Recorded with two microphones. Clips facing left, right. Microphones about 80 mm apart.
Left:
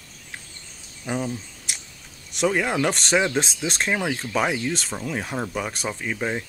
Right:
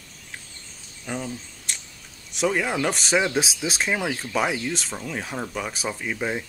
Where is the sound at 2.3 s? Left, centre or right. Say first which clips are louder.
Left 1 dB; centre.